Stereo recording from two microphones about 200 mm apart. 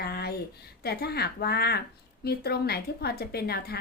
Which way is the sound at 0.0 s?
50° left (ahead or behind).